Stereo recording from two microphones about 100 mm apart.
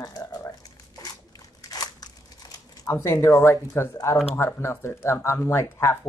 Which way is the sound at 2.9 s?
25° left (ahead or behind).